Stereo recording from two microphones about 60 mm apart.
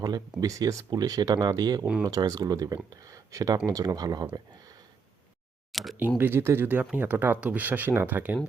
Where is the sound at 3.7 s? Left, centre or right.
Right.